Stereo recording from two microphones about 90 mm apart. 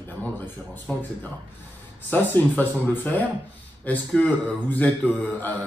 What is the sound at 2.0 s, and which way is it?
A man's voice, 20° left (ahead or behind).